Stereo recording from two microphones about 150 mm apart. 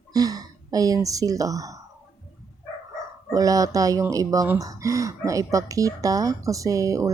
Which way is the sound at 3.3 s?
25° right (ahead or behind).